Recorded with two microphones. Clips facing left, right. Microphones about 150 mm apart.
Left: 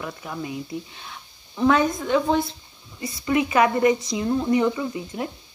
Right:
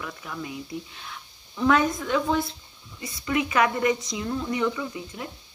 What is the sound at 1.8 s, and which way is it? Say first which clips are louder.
Speech: left 3 dB; 25° left (ahead or behind).